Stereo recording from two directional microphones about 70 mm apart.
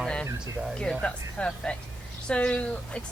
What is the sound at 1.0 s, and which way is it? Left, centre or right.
Speech, centre.